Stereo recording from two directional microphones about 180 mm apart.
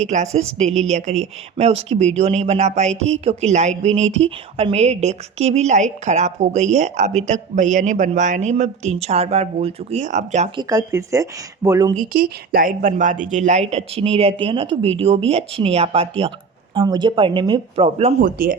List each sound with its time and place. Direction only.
0.3 s speech: 40° right (ahead or behind)
10.6 s speech: 15° right (ahead or behind)
11.9 s speech: 55° right (ahead or behind); by 17.8 s 25° right (ahead or behind)
17.8 s speech: 35° right (ahead or behind)
18.2 s speech: 50° right (ahead or behind)